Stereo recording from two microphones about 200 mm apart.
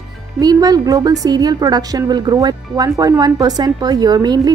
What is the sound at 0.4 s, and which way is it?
Speech, 20° right (ahead or behind).